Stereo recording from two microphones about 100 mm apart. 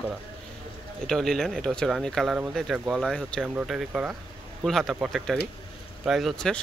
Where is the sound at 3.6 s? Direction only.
5° right (ahead or behind).